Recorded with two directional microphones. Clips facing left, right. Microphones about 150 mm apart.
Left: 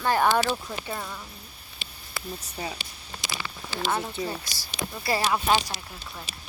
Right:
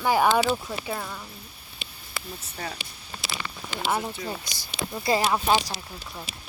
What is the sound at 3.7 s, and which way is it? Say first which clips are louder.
Speech: right 1 dB; 15° right (ahead or behind).